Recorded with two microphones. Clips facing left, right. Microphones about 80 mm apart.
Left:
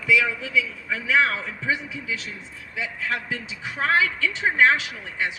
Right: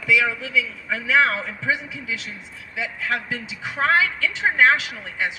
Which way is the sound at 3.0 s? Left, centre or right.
Right.